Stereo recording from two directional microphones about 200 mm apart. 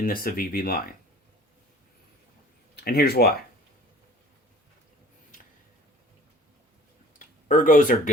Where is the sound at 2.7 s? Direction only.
50° left (ahead or behind).